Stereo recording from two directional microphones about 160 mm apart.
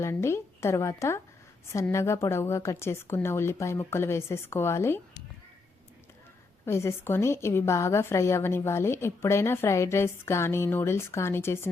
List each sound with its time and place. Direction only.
0.0 s a woman's voice: 15° left (ahead or behind)
6.7 s a woman's voice: 15° left (ahead or behind)